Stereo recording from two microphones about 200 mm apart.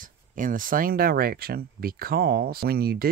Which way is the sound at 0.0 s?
45° right (ahead or behind).